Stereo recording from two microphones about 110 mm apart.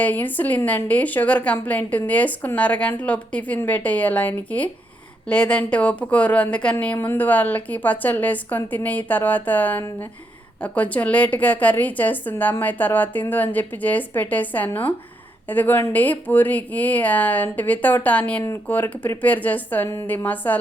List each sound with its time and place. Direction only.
0.0 s a woman's voice: 15° left (ahead or behind)